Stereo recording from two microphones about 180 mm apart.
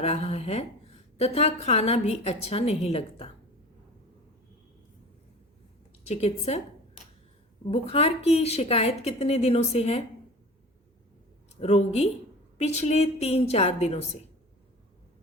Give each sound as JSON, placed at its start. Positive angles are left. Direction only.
{"t": 0.0, "sound": "a woman's voice", "side_deg": 35}
{"t": 6.1, "sound": "a woman's voice", "side_deg": 35}
{"t": 7.7, "sound": "a woman's voice", "side_deg": 35}
{"t": 11.6, "sound": "a woman's voice", "side_deg": 35}